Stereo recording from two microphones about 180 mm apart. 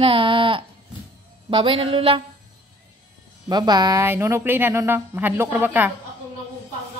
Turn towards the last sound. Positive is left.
turn(degrees=-10)  # may be behind; listen again after turning